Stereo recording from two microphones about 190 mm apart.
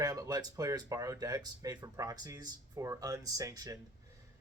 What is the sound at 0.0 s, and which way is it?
Speech, 20° right (ahead or behind).